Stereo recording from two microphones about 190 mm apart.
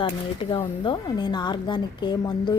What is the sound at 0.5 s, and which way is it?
A woman's voice, 25° left (ahead or behind).